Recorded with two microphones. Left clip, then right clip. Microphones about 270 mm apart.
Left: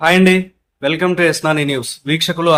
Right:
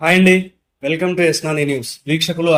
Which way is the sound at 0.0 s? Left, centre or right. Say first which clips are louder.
Left 1 dB; centre.